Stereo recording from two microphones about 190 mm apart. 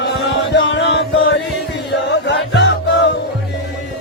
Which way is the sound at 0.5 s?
65° left (ahead or behind).